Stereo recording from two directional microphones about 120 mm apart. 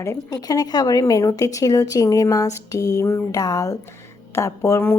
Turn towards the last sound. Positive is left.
turn(degrees=20)  # may be behind; listen again after turning